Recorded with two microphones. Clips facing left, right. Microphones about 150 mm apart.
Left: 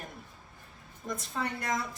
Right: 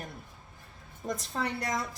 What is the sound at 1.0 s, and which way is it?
Speech, 35° right (ahead or behind).